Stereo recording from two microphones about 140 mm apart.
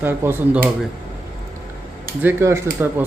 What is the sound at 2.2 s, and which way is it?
Speech, 15° right (ahead or behind).